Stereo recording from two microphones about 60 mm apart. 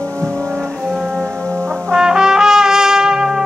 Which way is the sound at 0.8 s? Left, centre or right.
Centre.